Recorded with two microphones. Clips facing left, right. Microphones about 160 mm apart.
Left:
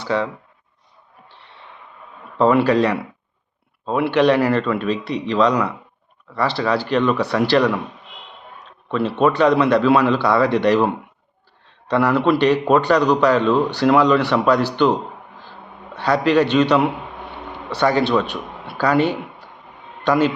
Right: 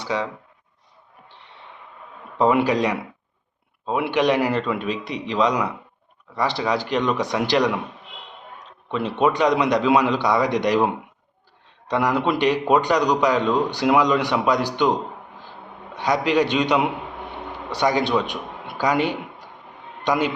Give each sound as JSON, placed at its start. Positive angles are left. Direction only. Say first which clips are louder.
{"t": 0.0, "sound": "speech", "louder": "left 4 dB", "side_deg": -15}
{"t": 2.4, "sound": "a man's voice", "louder": "left 3 dB", "side_deg": -15}
{"t": 8.9, "sound": "a man's voice", "louder": "left 3 dB", "side_deg": -15}
{"t": 16.0, "sound": "a man's voice", "louder": "left 3 dB", "side_deg": -15}